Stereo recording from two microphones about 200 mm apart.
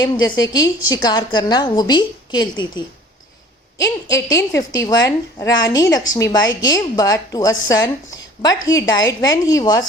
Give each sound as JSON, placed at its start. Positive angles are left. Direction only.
{"t": 0.0, "sound": "a woman's voice", "side_deg": 20}
{"t": 4.1, "sound": "a woman's voice", "side_deg": 15}